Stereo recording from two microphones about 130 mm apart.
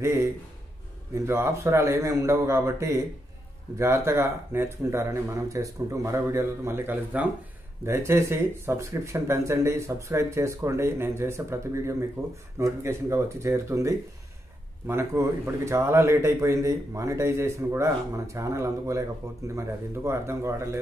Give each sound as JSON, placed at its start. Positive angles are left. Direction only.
{"t": 0.0, "sound": "speech", "side_deg": -20}